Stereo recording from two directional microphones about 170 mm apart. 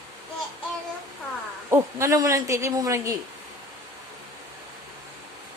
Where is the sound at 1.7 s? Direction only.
15° right (ahead or behind).